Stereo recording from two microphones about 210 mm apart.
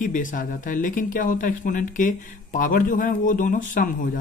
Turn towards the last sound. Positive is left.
turn(degrees=40)  # may be behind; listen again after turning